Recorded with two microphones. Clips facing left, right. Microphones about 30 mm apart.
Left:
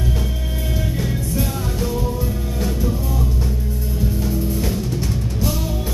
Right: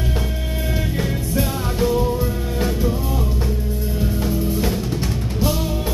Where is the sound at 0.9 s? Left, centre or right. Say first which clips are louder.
Right 1 dB; centre.